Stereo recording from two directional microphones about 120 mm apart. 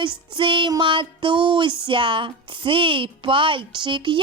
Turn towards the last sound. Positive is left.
turn(degrees=-40)  # may be behind; listen again after turning